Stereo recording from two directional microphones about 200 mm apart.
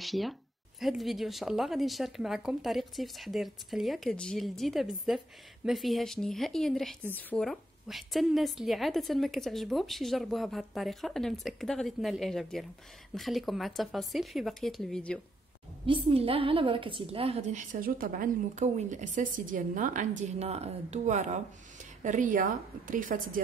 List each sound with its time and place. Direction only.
0.0 s a woman's voice: centre (ahead or behind)
15.8 s a woman's voice: 25° right (ahead or behind); by 23.4 s 40° right (ahead or behind)